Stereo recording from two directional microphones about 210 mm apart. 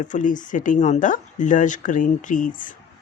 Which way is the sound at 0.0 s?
35° left (ahead or behind).